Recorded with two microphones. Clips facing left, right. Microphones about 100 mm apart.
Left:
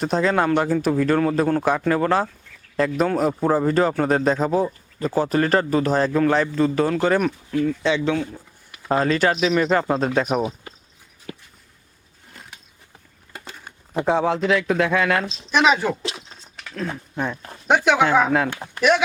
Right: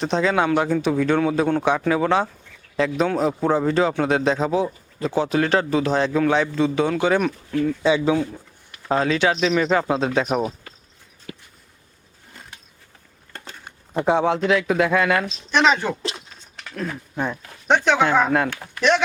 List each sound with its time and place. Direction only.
0.0 s speech: 5° left (ahead or behind)
8.7 s speech: 5° left (ahead or behind)
10.4 s speech: 15° left (ahead or behind)
12.3 s a sound: centre (ahead or behind)
13.3 s speech: 5° left (ahead or behind)